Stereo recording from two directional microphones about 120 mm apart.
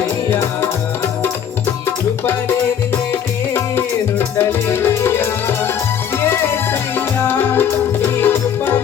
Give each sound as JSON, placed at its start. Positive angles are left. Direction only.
{"t": 0.3, "sound": "music", "side_deg": 20}
{"t": 2.9, "sound": "music", "side_deg": 20}